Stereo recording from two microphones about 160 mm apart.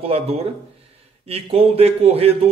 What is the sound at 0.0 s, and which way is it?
A man's voice, 40° right (ahead or behind).